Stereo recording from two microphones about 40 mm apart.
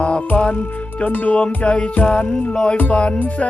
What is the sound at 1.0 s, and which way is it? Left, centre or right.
Music, left.